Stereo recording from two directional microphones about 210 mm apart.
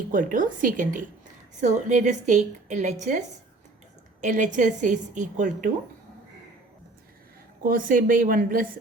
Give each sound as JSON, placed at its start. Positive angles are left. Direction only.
{"t": 0.1, "sound": "a woman's voice", "side_deg": -40}
{"t": 7.6, "sound": "a woman's voice", "side_deg": -40}